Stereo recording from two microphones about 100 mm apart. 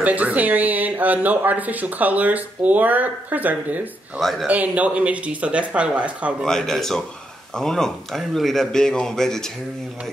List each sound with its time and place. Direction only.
0.0 s speech: 15° right (ahead or behind)
4.2 s a man's voice: centre (ahead or behind)
4.5 s speech: 15° right (ahead or behind)
6.4 s a man's voice: 5° left (ahead or behind)